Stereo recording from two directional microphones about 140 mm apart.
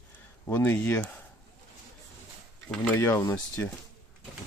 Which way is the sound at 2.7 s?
15° left (ahead or behind).